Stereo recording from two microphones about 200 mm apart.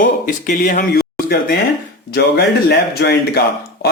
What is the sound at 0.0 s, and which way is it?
Speech, 40° left (ahead or behind).